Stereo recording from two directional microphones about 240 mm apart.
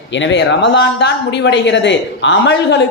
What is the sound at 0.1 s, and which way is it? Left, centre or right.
A woman's voice, left.